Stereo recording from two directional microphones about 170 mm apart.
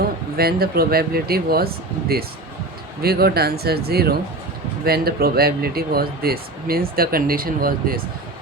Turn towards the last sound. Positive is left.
turn(degrees=-60)  # may be behind; listen again after turning